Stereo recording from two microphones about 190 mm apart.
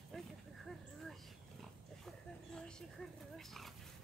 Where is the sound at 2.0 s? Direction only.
5° left (ahead or behind).